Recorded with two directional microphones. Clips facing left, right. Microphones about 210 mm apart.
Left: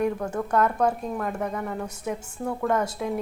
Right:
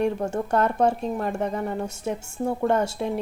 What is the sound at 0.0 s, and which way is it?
Speech, 25° right (ahead or behind).